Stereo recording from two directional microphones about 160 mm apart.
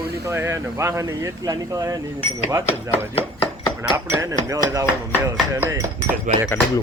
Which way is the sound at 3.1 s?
30° left (ahead or behind).